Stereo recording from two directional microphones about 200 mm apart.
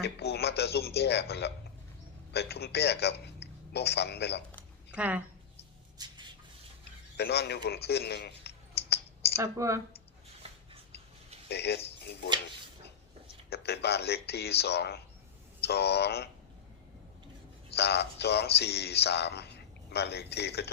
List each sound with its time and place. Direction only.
0.0 s a man's voice: 55° left (ahead or behind)
4.9 s speech: 5° right (ahead or behind)
7.2 s a man's voice: 55° left (ahead or behind)
7.9 s a sound: 55° left (ahead or behind)
9.4 s speech: 15° right (ahead or behind)
11.4 s speech: 55° left (ahead or behind)
13.5 s a man's voice: 55° left (ahead or behind)
17.7 s a man's voice: 55° left (ahead or behind)